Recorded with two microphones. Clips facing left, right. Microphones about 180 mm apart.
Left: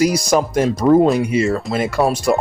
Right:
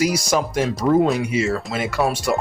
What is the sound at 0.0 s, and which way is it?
Speech, 45° left (ahead or behind).